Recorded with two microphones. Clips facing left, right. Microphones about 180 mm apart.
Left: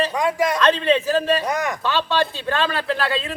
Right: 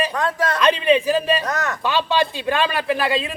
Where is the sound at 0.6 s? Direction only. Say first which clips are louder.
Right 4 dB; 15° right (ahead or behind).